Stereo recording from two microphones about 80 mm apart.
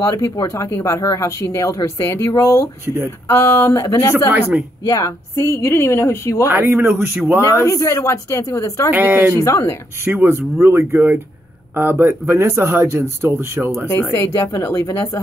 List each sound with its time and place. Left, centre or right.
0.0 s speech: left
4.3 s speech: right
4.8 s a woman's voice: left
5.3 s speech: left
6.4 s speech: right
7.4 s speech: left
8.9 s speech: right
9.4 s speech: left
10.0 s speech: right
14.1 s speech: left